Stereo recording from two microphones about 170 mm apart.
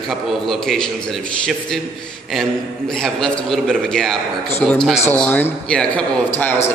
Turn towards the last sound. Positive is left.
turn(degrees=10)  # may be behind; listen again after turning